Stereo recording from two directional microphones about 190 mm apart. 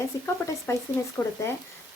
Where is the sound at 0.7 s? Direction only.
15° left (ahead or behind).